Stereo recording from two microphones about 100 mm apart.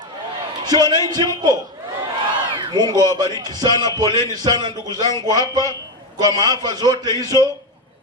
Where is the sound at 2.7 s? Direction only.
40° right (ahead or behind).